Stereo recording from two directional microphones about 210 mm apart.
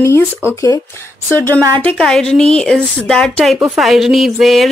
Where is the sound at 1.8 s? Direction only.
5° left (ahead or behind).